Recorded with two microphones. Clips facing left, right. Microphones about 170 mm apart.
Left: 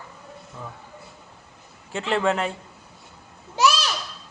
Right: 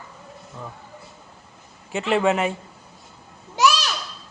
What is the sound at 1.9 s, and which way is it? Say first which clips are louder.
Speech: right 3 dB; 10° right (ahead or behind).